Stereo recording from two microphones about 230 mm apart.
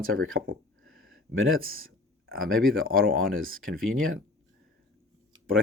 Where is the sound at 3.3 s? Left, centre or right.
Right.